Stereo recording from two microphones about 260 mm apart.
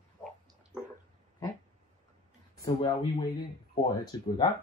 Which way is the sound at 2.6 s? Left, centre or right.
Centre.